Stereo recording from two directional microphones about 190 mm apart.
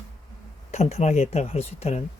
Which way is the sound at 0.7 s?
35° left (ahead or behind).